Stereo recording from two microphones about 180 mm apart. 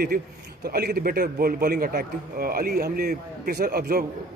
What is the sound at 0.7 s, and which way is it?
A man's voice, 55° right (ahead or behind).